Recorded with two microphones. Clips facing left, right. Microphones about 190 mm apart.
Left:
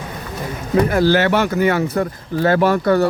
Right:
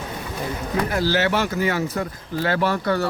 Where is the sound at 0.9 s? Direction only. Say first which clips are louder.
Left 4 dB; 55° left (ahead or behind).